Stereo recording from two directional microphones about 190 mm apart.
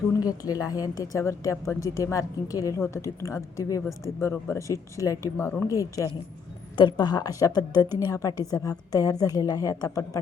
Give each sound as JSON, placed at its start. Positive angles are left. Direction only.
{"t": 0.2, "sound": "a woman's voice", "side_deg": 20}